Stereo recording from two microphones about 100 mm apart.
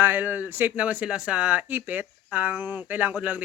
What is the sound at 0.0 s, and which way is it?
Speech, 20° right (ahead or behind).